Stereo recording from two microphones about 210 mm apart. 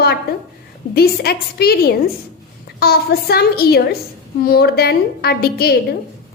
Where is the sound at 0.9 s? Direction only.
45° left (ahead or behind).